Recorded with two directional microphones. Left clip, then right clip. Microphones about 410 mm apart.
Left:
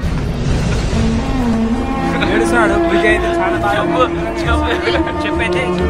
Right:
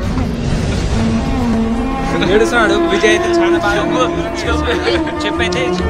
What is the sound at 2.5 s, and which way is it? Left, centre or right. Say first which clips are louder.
Music: even; centre.